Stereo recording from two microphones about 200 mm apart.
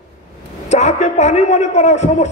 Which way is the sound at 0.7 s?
35° left (ahead or behind).